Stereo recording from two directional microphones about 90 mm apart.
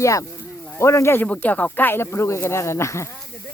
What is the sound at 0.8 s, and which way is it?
Speech, 30° left (ahead or behind).